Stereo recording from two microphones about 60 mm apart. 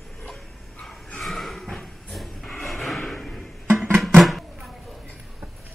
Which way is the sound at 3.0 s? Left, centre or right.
Centre.